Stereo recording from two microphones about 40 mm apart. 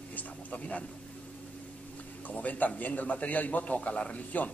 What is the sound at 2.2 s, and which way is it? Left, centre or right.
A man's voice, left.